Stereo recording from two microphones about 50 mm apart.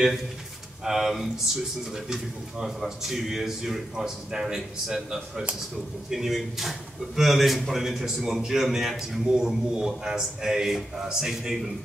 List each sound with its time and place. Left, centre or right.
0.8 s a man's voice: centre